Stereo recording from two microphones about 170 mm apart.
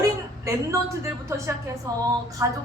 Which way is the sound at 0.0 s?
20° right (ahead or behind).